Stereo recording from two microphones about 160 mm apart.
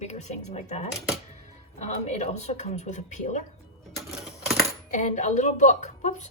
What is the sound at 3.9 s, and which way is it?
Typewriter, centre (ahead or behind).